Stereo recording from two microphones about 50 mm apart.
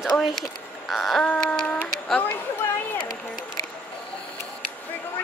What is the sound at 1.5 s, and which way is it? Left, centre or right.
Speech, left.